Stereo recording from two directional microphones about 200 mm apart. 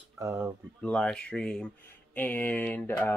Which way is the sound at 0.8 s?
5° left (ahead or behind).